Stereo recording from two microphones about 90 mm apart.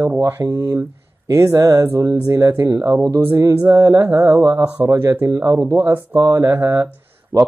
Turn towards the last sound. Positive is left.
turn(degrees=-35)  # may be behind; listen again after turning